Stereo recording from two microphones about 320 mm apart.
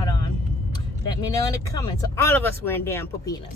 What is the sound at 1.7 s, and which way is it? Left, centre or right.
Speech, centre.